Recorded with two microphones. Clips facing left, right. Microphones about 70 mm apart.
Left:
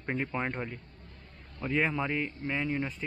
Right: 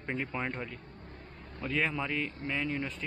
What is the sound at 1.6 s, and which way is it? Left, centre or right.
Speech, centre.